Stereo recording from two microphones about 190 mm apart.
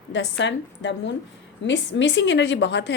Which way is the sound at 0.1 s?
70° left (ahead or behind).